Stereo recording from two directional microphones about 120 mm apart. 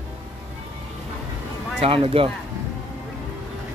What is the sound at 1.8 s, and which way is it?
Speech, 50° right (ahead or behind).